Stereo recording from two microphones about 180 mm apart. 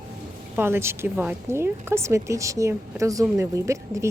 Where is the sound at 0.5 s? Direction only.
15° right (ahead or behind).